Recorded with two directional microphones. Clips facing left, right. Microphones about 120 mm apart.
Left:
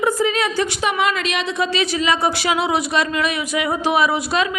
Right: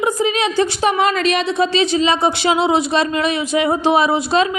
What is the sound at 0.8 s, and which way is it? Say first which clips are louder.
A woman's voice: right 5 dB; 40° right (ahead or behind).